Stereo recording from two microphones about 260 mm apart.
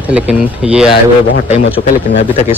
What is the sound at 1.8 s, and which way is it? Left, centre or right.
Speech, left.